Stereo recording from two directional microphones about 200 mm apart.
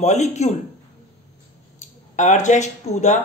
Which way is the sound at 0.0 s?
35° left (ahead or behind).